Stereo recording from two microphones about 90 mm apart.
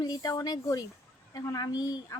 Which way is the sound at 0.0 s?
45° left (ahead or behind).